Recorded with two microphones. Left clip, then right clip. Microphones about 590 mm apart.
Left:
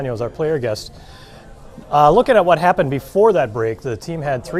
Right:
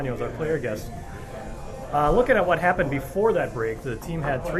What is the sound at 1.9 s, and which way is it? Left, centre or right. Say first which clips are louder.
Speech: left 8 dB; left.